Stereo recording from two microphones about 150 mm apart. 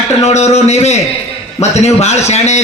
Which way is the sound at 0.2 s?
45° left (ahead or behind).